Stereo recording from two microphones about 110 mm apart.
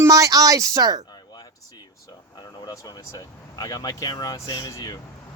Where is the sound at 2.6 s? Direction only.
30° left (ahead or behind).